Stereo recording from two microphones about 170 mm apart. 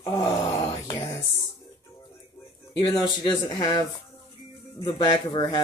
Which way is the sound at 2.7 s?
25° left (ahead or behind).